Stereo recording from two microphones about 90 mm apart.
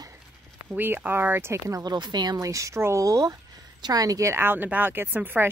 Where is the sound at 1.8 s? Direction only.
50° right (ahead or behind).